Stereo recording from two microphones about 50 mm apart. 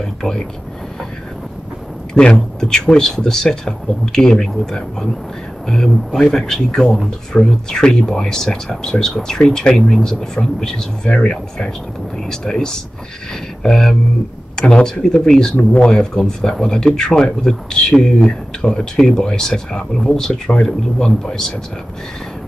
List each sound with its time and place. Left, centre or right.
0.0 s speech: centre
2.1 s speech: left